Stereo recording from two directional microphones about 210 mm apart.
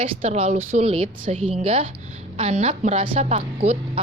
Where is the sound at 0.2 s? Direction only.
30° right (ahead or behind).